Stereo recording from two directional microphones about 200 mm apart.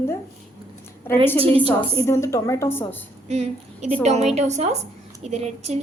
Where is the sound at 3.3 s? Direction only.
35° right (ahead or behind).